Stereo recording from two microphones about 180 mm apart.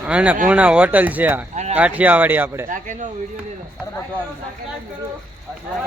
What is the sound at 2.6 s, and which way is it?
Speech, 45° right (ahead or behind).